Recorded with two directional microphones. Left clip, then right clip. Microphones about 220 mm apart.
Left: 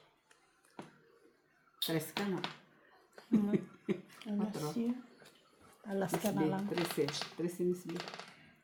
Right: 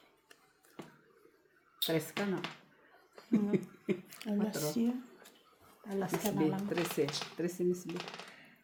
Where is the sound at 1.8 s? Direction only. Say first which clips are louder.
Right 3 dB; 5° right (ahead or behind).